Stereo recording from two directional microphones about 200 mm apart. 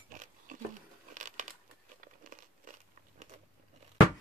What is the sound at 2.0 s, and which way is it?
Crumpling, 40° right (ahead or behind).